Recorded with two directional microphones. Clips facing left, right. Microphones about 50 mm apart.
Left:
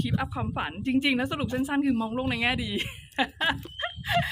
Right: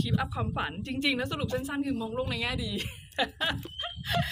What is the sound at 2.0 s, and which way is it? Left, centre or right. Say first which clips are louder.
Speech: left 4 dB; left.